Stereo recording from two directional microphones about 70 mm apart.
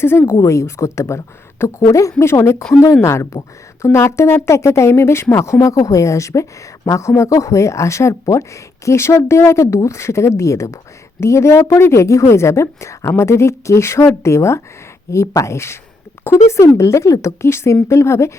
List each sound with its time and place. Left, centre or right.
0.0 s speech: left
0.3 s a woman's voice: left
5.5 s a woman's voice: left